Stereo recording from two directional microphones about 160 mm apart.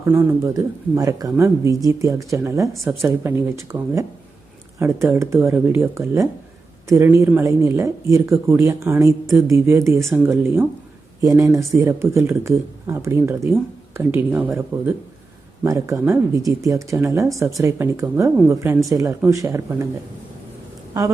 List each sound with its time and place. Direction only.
0.0 s speech: 15° right (ahead or behind)
15.6 s speech: 20° right (ahead or behind)